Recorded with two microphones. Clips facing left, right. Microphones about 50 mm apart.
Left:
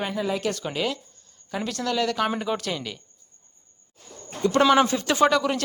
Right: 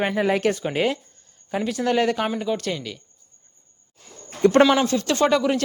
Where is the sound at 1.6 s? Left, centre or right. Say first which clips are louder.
Right 4 dB; centre.